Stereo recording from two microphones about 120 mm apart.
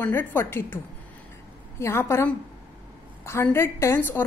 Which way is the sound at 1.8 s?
20° left (ahead or behind).